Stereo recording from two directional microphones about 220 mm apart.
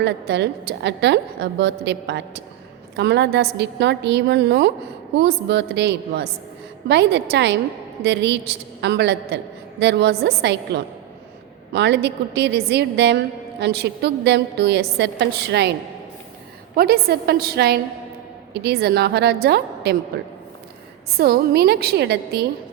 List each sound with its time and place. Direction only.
0.0 s a woman's voice: 50° right (ahead or behind)
16.7 s a woman's voice: 45° right (ahead or behind)
21.2 s a woman's voice: 45° right (ahead or behind)